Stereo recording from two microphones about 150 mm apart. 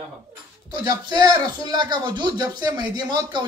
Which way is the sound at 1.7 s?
30° right (ahead or behind).